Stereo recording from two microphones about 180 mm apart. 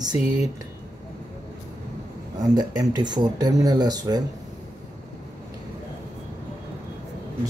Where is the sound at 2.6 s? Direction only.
20° right (ahead or behind).